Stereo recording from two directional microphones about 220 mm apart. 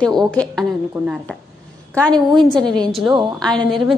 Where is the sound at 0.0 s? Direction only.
5° left (ahead or behind).